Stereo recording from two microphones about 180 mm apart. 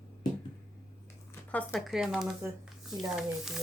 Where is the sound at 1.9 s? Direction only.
Centre (ahead or behind).